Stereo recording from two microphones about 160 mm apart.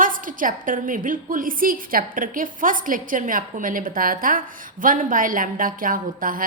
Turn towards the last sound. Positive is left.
turn(degrees=-60)  # may be behind; listen again after turning